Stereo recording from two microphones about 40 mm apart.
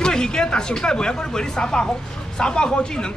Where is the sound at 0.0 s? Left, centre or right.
Centre.